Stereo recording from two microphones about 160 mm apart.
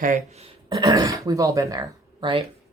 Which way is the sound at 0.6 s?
25° right (ahead or behind).